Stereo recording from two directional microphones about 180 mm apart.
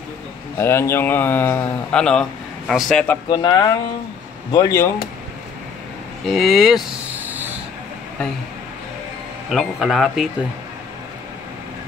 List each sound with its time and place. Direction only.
0.6 s speech: 15° left (ahead or behind)
3.3 s speech: 25° left (ahead or behind)
6.2 s a sound: centre (ahead or behind)
9.5 s speech: centre (ahead or behind)